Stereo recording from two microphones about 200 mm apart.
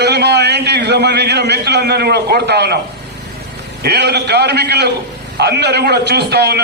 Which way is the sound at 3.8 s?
55° right (ahead or behind).